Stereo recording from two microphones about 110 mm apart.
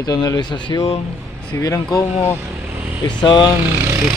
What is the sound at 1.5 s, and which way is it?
Speech, 30° left (ahead or behind).